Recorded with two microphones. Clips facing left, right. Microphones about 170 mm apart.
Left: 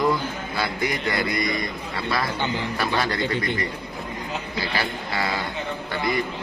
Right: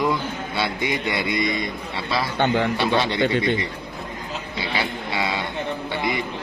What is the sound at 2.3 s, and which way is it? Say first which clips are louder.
Speech: right 6 dB; 65° right (ahead or behind).